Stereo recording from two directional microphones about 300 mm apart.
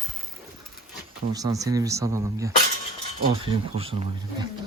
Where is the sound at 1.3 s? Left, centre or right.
Centre.